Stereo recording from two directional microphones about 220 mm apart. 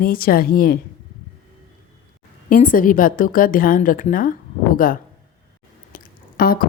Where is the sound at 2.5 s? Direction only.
40° left (ahead or behind).